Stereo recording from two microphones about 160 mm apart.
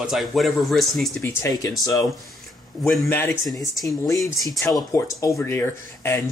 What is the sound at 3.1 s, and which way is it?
Speech, 15° left (ahead or behind).